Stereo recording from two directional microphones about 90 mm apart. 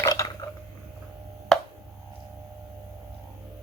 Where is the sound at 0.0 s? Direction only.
40° left (ahead or behind).